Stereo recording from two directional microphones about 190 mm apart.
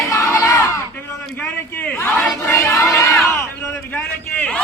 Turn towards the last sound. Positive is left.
turn(degrees=5)  # may be behind; listen again after turning